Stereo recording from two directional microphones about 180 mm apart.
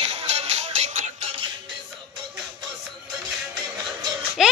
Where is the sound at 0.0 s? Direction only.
35° right (ahead or behind).